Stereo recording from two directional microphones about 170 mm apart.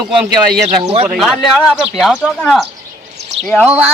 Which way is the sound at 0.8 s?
35° right (ahead or behind).